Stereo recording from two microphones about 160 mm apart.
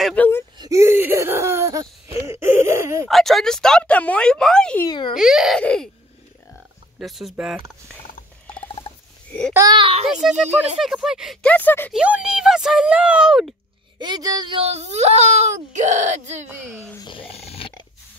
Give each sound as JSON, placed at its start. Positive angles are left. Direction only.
{"t": 0.0, "sound": "whimper", "side_deg": 10}
{"t": 0.6, "sound": "whimper", "side_deg": -20}
{"t": 3.1, "sound": "speech", "side_deg": 0}
{"t": 4.8, "sound": "a child's voice", "side_deg": 30}
{"t": 5.1, "sound": "speech", "side_deg": 0}
{"t": 7.0, "sound": "speech", "side_deg": 0}
{"t": 9.5, "sound": "a child's voice", "side_deg": -20}
{"t": 9.8, "sound": "a child's voice", "side_deg": -35}
{"t": 10.2, "sound": "speech", "side_deg": 0}
{"t": 11.4, "sound": "speech", "side_deg": 10}
{"t": 11.9, "sound": "speech", "side_deg": -5}
{"t": 13.9, "sound": "speech", "side_deg": -25}
{"t": 16.9, "sound": "speech", "side_deg": 30}